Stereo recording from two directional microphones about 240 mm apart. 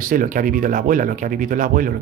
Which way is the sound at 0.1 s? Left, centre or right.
Right.